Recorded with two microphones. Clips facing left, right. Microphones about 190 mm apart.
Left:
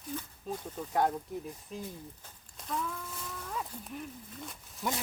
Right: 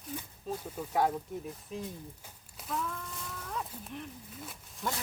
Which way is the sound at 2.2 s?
5° right (ahead or behind).